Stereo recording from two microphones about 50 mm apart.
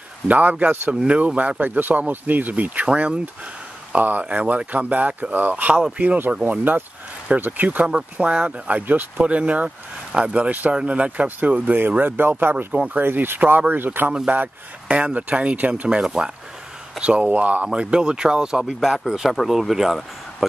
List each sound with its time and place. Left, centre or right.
0.3 s speech: right
1.0 s speech: right
1.6 s speech: right
7.8 s speech: right
16.0 s speech: centre
17.0 s speech: right
17.7 s speech: centre